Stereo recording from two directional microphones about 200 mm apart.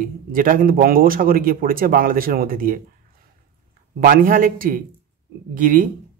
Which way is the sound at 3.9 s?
45° right (ahead or behind).